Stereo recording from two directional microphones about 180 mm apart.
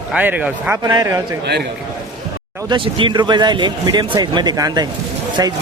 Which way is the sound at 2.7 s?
30° right (ahead or behind).